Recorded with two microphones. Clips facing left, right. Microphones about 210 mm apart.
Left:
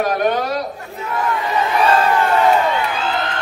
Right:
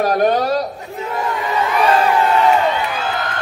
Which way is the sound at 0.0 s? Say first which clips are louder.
Right 3 dB; 35° right (ahead or behind).